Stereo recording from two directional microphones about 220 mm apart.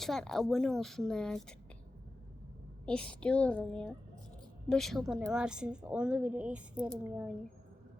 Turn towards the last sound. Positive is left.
turn(degrees=-5)  # may be behind; listen again after turning